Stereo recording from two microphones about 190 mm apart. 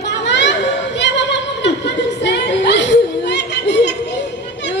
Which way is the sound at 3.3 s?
65° left (ahead or behind).